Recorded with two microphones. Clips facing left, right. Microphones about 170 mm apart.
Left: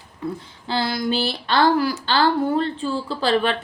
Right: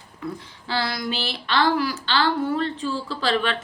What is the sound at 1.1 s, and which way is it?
A woman's voice, 35° left (ahead or behind).